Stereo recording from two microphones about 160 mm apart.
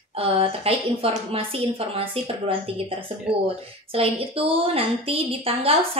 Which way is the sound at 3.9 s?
35° right (ahead or behind).